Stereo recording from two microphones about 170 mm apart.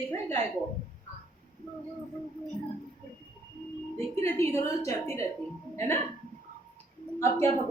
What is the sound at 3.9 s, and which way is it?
A woman's voice, 15° left (ahead or behind).